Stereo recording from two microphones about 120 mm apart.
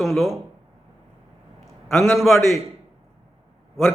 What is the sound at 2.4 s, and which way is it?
Speech, 25° left (ahead or behind).